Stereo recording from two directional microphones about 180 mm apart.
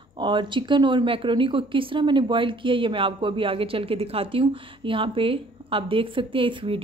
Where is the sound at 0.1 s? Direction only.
25° right (ahead or behind).